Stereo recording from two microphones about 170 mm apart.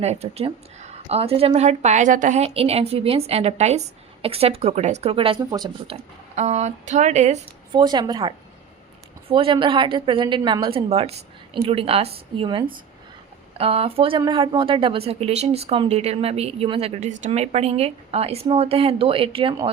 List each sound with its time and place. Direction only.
0.0 s speech: 40° right (ahead or behind)
6.3 s speech: 40° right (ahead or behind)
7.7 s speech: 25° right (ahead or behind)
9.3 s speech: 30° right (ahead or behind)